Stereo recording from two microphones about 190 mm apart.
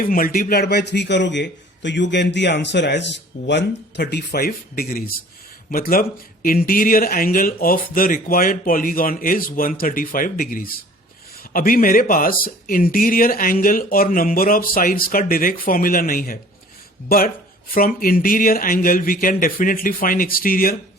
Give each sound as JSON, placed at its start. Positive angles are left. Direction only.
{"t": 0.0, "sound": "a man's voice", "side_deg": 50}